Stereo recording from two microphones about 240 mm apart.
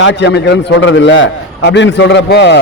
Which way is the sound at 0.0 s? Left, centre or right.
Left.